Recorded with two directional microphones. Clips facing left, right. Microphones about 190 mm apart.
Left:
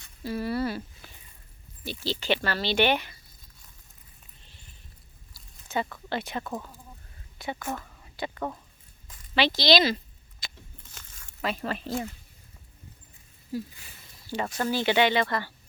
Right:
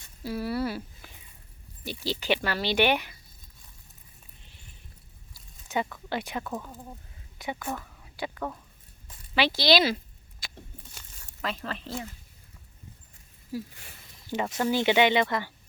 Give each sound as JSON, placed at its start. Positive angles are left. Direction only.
{"t": 0.2, "sound": "a sound", "side_deg": -10}
{"t": 1.8, "sound": "speech", "side_deg": -15}
{"t": 5.3, "sound": "a sound", "side_deg": -15}
{"t": 6.1, "sound": "speech", "side_deg": -10}
{"t": 6.4, "sound": "speech", "side_deg": 10}
{"t": 7.3, "sound": "speech", "side_deg": -15}
{"t": 7.9, "sound": "a sound", "side_deg": -5}
{"t": 9.3, "sound": "speech", "side_deg": -10}
{"t": 10.4, "sound": "vehicle", "side_deg": -10}
{"t": 11.4, "sound": "speech", "side_deg": 10}
{"t": 14.3, "sound": "speech", "side_deg": -20}